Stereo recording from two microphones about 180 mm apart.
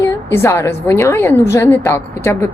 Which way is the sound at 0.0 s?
15° left (ahead or behind).